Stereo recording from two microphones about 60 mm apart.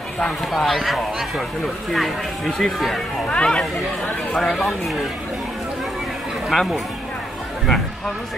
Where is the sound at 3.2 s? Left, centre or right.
Centre.